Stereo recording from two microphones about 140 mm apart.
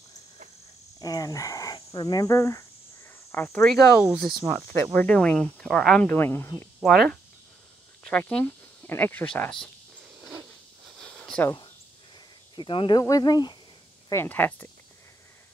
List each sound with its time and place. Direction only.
0.9 s speech: 25° left (ahead or behind)
4.0 s speech: 5° right (ahead or behind)
4.9 s speech: 10° left (ahead or behind)
6.0 s speech: 15° left (ahead or behind)
6.8 s speech: centre (ahead or behind)
11.0 s a sound: 5° left (ahead or behind)
12.5 s speech: 35° left (ahead or behind)
14.0 s speech: 20° left (ahead or behind)